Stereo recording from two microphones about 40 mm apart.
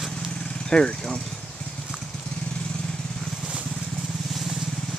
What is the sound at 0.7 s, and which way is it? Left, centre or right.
Speech, left.